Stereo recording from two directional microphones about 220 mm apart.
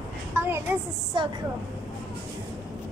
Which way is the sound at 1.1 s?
20° right (ahead or behind).